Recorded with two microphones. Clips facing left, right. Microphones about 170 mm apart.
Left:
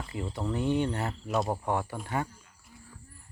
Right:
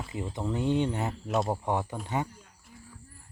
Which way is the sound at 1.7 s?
20° right (ahead or behind).